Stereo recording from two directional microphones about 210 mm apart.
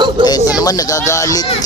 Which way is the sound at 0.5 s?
15° left (ahead or behind).